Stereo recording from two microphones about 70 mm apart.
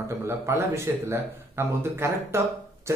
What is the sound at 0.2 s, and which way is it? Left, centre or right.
A man's voice, right.